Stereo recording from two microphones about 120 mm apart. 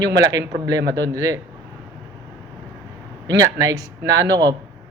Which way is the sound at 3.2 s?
30° right (ahead or behind).